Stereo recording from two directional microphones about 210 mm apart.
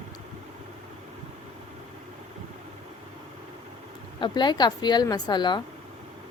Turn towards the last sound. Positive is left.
turn(degrees=20)  # may be behind; listen again after turning